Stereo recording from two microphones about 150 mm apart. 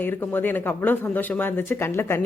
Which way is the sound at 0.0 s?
15° left (ahead or behind).